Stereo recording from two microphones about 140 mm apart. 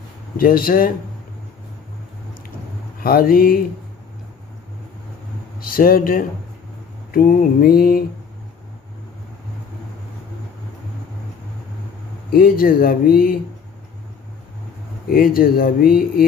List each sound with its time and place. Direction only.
0.3 s speech: 90° left
3.0 s speech: 90° left
5.5 s speech: 90° left
12.3 s speech: 90° left
15.1 s speech: 90° left